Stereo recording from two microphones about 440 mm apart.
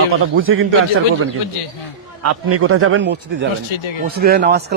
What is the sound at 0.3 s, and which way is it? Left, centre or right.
Speech, right.